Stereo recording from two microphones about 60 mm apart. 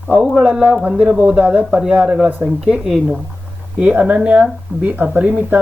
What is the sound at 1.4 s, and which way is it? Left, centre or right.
Speech, right.